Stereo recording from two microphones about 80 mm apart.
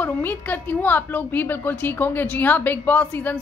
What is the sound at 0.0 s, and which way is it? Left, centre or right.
A woman's voice, left.